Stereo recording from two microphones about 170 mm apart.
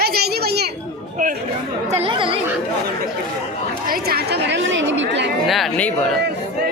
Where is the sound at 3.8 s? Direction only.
60° right (ahead or behind); by 5.3 s 90° right.